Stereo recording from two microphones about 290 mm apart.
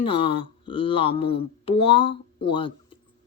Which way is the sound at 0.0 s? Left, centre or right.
Centre.